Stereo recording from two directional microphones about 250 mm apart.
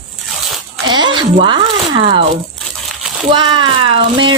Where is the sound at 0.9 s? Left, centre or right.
Centre.